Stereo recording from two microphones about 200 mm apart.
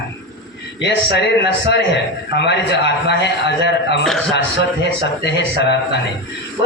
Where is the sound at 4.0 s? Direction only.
5° left (ahead or behind).